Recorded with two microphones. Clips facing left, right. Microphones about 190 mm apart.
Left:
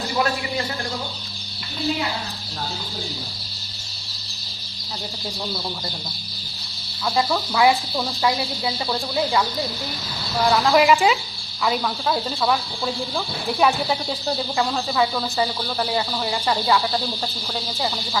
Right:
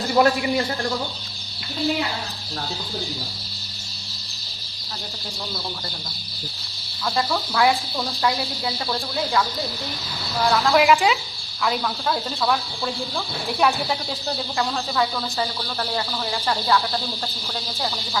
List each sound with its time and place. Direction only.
0.2 s speech: 45° right (ahead or behind)
7.2 s cricket: centre (ahead or behind)
10.5 s cricket: 5° left (ahead or behind)